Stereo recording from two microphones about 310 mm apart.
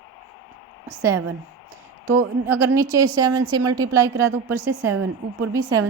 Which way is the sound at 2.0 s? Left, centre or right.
Centre.